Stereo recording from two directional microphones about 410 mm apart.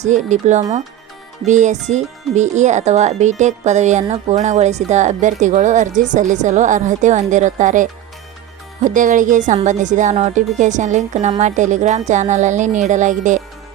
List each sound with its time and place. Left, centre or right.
0.0 s speech: centre